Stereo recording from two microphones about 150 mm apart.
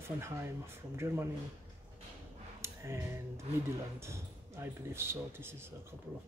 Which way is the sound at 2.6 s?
20° right (ahead or behind).